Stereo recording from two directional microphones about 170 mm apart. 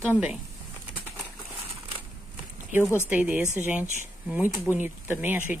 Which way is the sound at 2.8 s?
15° left (ahead or behind).